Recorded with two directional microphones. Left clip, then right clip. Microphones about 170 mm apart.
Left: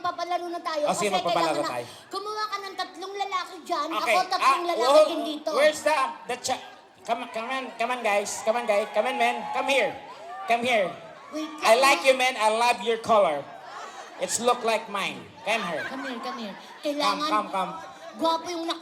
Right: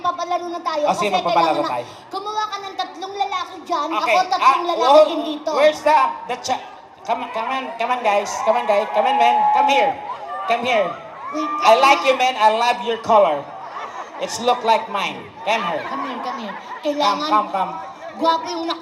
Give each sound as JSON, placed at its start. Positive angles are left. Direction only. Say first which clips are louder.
{"t": 0.0, "sound": "speech", "louder": "right 7 dB", "side_deg": 30}